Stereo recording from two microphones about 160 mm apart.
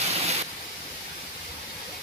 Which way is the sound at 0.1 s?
40° right (ahead or behind).